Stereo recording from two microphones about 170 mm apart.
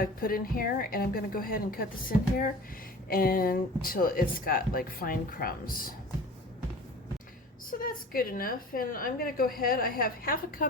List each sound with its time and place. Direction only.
0.0 s a woman's voice: 60° left (ahead or behind)
7.7 s a woman's voice: 55° left (ahead or behind)